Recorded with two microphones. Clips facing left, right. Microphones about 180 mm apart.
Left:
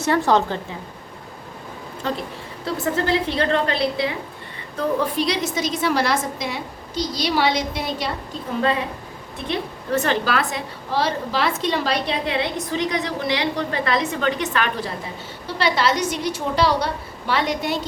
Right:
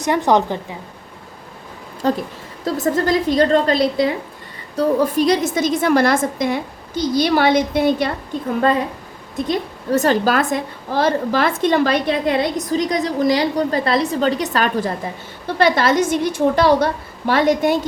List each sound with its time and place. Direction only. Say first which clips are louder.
0.0 s a woman's voice: right 2 dB; 15° right (ahead or behind)
2.0 s a woman's voice: right 7 dB; 40° right (ahead or behind)
9.5 s a woman's voice: right 4 dB; 40° right (ahead or behind)